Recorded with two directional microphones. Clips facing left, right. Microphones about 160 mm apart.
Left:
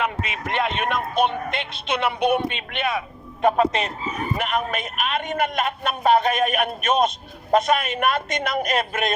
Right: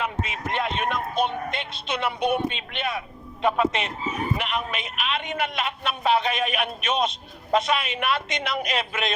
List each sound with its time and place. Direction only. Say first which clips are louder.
0.0 s speech: left 3 dB; 70° left (ahead or behind)
3.4 s a man's voice: left 4 dB; 40° left (ahead or behind)